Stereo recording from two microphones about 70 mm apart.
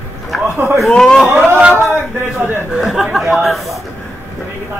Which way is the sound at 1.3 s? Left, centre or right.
Right.